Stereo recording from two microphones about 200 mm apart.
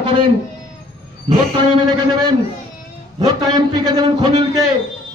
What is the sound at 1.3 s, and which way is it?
Speech, 25° right (ahead or behind).